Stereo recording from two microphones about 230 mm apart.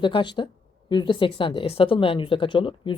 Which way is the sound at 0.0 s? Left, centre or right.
Centre.